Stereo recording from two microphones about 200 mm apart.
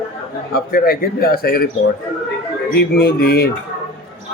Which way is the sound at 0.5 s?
50° left (ahead or behind).